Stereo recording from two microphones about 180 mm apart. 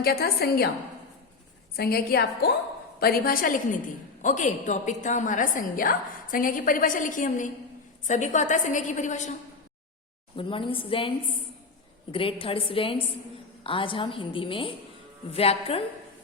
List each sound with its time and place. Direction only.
0.0 s a woman's voice: 60° left (ahead or behind)
1.7 s a woman's voice: 60° left (ahead or behind); by 9.3 s 40° left (ahead or behind)
10.3 s a woman's voice: 30° left (ahead or behind)
12.1 s a woman's voice: 30° left (ahead or behind)